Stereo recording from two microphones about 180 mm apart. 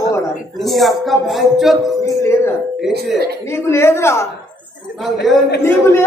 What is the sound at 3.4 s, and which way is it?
Speech, 15° left (ahead or behind).